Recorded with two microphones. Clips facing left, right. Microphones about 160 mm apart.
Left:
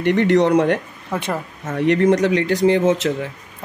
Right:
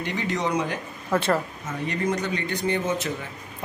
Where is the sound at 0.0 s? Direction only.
65° left (ahead or behind).